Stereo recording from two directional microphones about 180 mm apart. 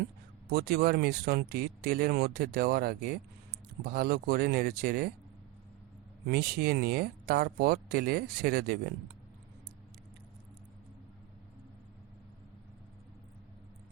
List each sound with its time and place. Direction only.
0.5 s speech: 60° right (ahead or behind)
6.2 s speech: 60° right (ahead or behind)